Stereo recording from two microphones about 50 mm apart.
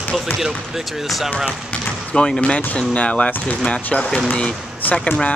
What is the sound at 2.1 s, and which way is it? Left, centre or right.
Speech, centre.